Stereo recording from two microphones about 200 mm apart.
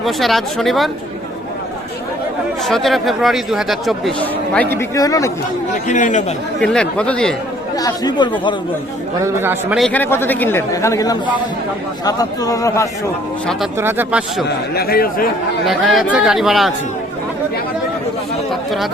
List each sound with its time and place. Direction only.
0.0 s speech: centre (ahead or behind)
2.6 s speech: centre (ahead or behind)
4.7 s speech: 15° left (ahead or behind)
5.9 s speech: 40° left (ahead or behind)
6.6 s speech: 5° left (ahead or behind)
7.8 s speech: 20° left (ahead or behind)
9.2 s speech: 10° right (ahead or behind); by 12.9 s 15° left (ahead or behind)
13.7 s speech: 10° right (ahead or behind)
14.4 s a man's voice: 50° left (ahead or behind)
15.6 s speech: centre (ahead or behind)